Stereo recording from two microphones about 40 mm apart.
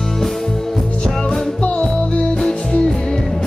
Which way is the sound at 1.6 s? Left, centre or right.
Left.